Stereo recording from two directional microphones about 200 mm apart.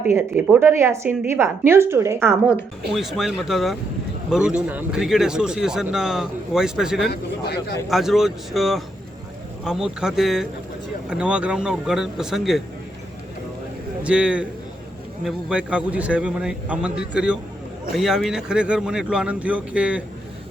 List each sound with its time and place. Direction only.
0.0 s a woman's voice: 10° right (ahead or behind)
2.9 s speech: centre (ahead or behind)
7.1 s speech: 55° left (ahead or behind)
7.9 s speech: centre (ahead or behind)
14.0 s speech: 5° right (ahead or behind)